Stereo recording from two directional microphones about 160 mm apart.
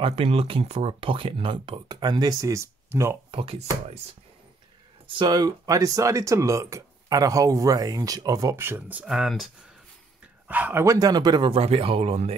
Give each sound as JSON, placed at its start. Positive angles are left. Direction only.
{"t": 0.0, "sound": "speech", "side_deg": -35}
{"t": 3.3, "sound": "speech", "side_deg": -35}
{"t": 5.0, "sound": "speech", "side_deg": -30}
{"t": 10.5, "sound": "speech", "side_deg": -10}